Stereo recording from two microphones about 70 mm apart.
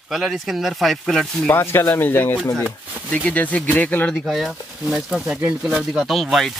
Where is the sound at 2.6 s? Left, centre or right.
Centre.